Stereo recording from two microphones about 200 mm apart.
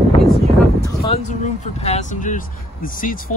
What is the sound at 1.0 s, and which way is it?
Speech, 35° left (ahead or behind).